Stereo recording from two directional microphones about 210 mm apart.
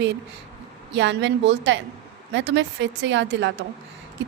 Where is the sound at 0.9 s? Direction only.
60° right (ahead or behind).